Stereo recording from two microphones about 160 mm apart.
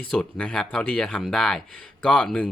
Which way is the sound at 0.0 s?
5° left (ahead or behind).